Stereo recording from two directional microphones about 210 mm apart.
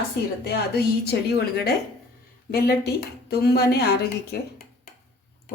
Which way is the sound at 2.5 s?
50° left (ahead or behind).